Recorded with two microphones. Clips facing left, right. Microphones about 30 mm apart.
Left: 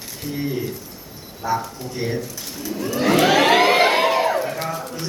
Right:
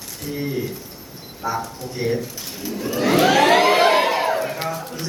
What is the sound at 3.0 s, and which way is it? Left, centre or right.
Crowd, centre.